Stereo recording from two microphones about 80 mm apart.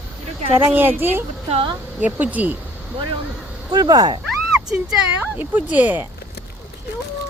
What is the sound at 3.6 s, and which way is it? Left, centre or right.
Speech, right.